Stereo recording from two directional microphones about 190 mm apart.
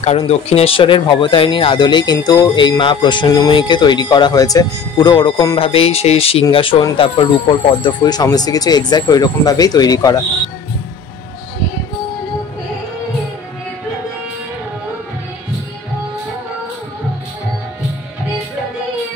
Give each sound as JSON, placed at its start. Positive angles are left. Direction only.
{"t": 0.2, "sound": "speech", "side_deg": 30}